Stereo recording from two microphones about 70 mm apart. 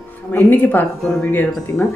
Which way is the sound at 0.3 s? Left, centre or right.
Left.